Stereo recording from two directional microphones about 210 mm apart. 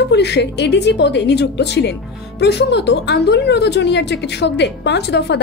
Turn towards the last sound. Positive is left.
turn(degrees=55)  # may be behind; listen again after turning